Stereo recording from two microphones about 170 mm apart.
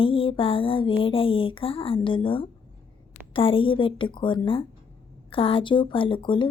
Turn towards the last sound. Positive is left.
turn(degrees=30)  # may be behind; listen again after turning